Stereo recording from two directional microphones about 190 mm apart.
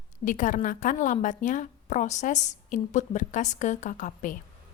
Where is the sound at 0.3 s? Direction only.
40° left (ahead or behind).